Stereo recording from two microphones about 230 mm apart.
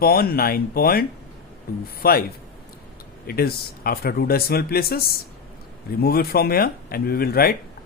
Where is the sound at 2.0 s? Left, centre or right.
Left.